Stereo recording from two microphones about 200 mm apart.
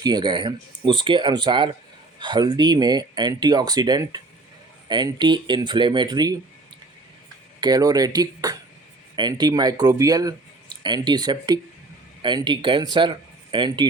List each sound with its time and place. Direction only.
0.0 s speech: 20° right (ahead or behind)
7.6 s speech: 20° right (ahead or behind)